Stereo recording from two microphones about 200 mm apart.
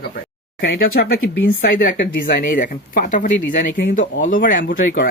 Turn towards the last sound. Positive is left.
turn(degrees=45)  # may be behind; listen again after turning